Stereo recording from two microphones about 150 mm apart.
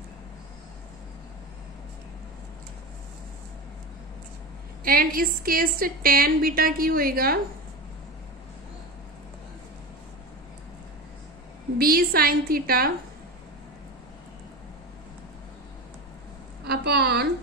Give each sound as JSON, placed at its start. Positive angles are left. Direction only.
{"t": 4.8, "sound": "a woman's voice", "side_deg": -75}
{"t": 11.8, "sound": "a woman's voice", "side_deg": -80}
{"t": 16.6, "sound": "a woman's voice", "side_deg": -90}